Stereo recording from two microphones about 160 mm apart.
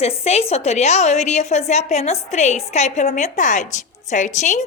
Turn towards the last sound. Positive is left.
turn(degrees=50)  # may be behind; listen again after turning